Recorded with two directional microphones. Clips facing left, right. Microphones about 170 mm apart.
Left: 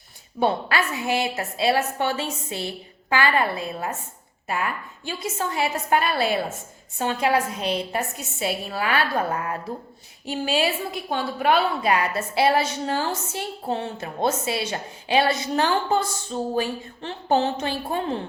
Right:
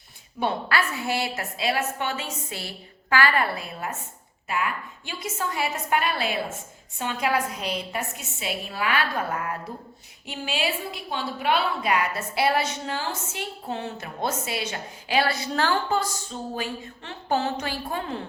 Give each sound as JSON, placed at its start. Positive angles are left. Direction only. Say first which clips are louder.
{"t": 0.7, "sound": "a woman's voice", "louder": "left 2 dB", "side_deg": 20}
{"t": 4.4, "sound": "a woman's voice", "louder": "left 1 dB", "side_deg": 40}
{"t": 7.9, "sound": "a woman's voice", "louder": "left 4 dB", "side_deg": 40}
{"t": 10.2, "sound": "a woman's voice", "louder": "left 5 dB", "side_deg": 40}